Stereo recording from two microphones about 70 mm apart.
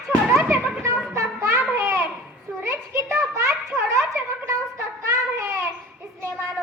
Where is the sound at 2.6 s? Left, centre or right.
Right.